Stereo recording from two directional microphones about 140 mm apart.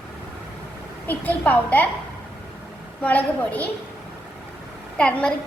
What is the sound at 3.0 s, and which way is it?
Speech, 10° left (ahead or behind).